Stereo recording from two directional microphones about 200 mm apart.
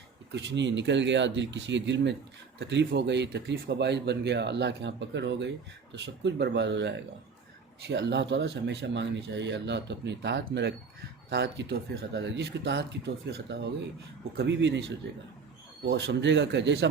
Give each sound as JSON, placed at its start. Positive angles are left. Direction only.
{"t": 0.3, "sound": "speech", "side_deg": -60}